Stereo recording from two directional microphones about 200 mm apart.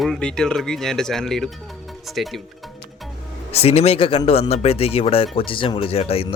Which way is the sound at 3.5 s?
30° left (ahead or behind).